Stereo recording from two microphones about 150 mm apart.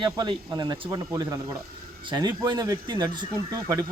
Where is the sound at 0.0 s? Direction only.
30° right (ahead or behind).